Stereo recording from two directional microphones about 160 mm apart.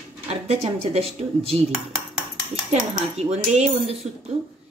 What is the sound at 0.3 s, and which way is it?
Speech, 40° right (ahead or behind).